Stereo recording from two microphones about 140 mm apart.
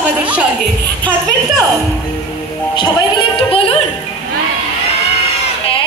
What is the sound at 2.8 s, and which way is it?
Music, 40° left (ahead or behind).